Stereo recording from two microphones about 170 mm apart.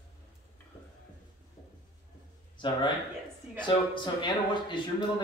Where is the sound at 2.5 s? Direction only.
25° left (ahead or behind).